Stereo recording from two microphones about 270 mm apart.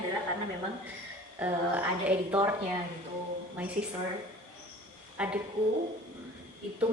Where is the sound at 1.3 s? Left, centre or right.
Centre.